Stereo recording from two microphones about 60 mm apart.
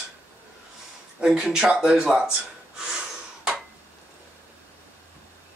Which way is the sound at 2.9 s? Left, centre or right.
Centre.